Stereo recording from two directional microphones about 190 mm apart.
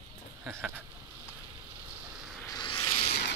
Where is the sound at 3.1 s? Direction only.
60° left (ahead or behind).